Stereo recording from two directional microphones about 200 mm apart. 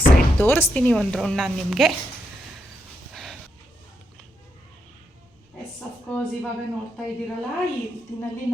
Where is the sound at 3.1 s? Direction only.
Centre (ahead or behind).